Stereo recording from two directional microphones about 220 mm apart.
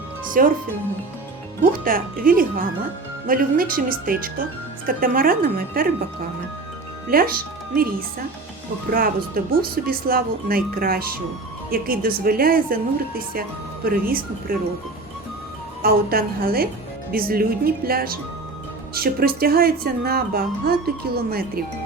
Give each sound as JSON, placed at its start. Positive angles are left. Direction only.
{"t": 0.4, "sound": "a woman's voice", "side_deg": -40}
{"t": 1.8, "sound": "a woman's voice", "side_deg": -40}
{"t": 7.1, "sound": "speech", "side_deg": -40}
{"t": 8.9, "sound": "a woman's voice", "side_deg": -40}
{"t": 15.8, "sound": "speech", "side_deg": -45}